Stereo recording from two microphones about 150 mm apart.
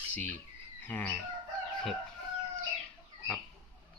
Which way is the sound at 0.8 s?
10° left (ahead or behind).